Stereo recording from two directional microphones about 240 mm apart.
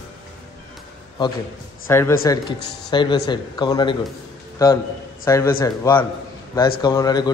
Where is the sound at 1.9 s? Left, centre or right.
Centre.